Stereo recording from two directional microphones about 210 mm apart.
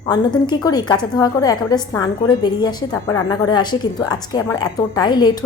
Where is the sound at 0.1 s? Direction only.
20° left (ahead or behind).